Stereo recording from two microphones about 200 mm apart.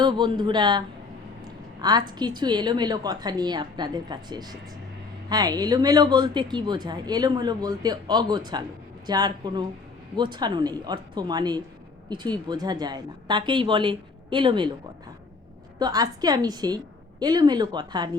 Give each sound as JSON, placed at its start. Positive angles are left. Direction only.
{"t": 0.0, "sound": "a woman's voice", "side_deg": -20}
{"t": 15.8, "sound": "a woman's voice", "side_deg": -20}